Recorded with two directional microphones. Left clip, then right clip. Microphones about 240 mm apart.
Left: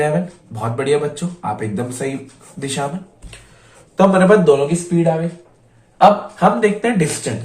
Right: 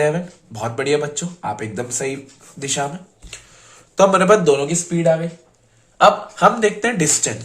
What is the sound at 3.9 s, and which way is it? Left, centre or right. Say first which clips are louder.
A man's voice: left 1 dB; right.